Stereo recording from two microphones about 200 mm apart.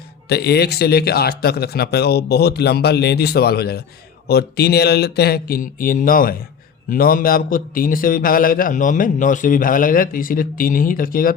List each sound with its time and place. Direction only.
0.3 s a man's voice: 55° left (ahead or behind)